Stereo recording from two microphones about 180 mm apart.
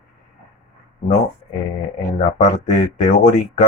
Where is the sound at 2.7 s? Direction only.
40° left (ahead or behind).